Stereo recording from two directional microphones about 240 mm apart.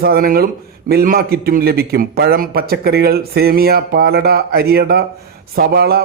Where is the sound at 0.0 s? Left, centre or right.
Right.